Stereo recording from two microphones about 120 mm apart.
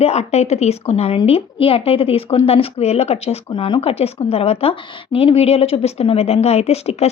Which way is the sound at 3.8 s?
55° left (ahead or behind).